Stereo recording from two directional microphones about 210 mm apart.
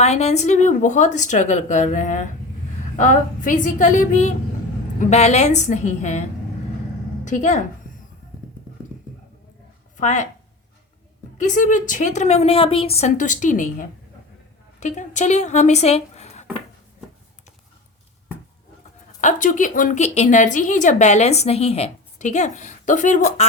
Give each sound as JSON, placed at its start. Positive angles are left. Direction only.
{"t": 0.0, "sound": "a woman's voice", "side_deg": 30}
{"t": 7.3, "sound": "a woman's voice", "side_deg": 35}
{"t": 10.0, "sound": "a woman's voice", "side_deg": 35}
{"t": 11.3, "sound": "a woman's voice", "side_deg": 35}
{"t": 19.2, "sound": "a woman's voice", "side_deg": 35}